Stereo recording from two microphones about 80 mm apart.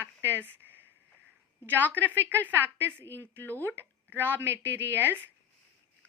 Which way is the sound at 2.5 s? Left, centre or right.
Right.